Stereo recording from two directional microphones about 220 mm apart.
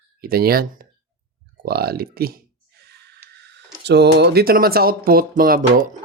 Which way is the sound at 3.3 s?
50° right (ahead or behind).